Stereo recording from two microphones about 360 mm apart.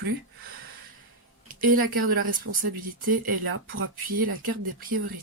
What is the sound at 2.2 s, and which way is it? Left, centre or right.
Speech, right.